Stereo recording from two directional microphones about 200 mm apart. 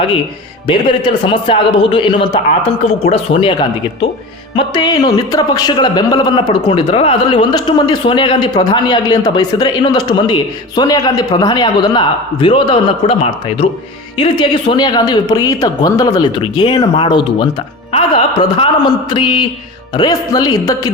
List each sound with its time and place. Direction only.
0.7 s a man's voice: 25° left (ahead or behind)
4.5 s a man's voice: 20° left (ahead or behind)